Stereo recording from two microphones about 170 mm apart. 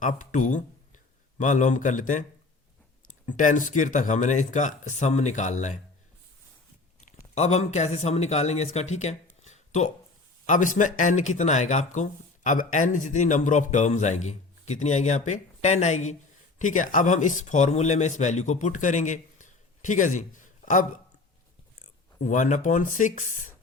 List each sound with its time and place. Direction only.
0.0 s speech: 50° left (ahead or behind)
7.3 s a man's voice: 40° left (ahead or behind)
9.4 s a sound: 45° left (ahead or behind)
10.4 s speech: 45° left (ahead or behind)